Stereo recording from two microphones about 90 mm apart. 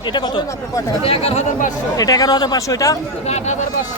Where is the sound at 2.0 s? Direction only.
45° left (ahead or behind).